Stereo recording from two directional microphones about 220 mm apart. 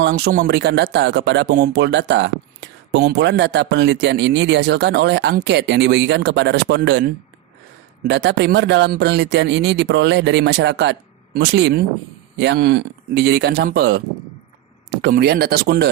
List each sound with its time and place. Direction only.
0.0 s speech: 40° right (ahead or behind)